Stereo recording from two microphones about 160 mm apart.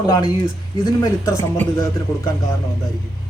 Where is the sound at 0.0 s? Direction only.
25° left (ahead or behind).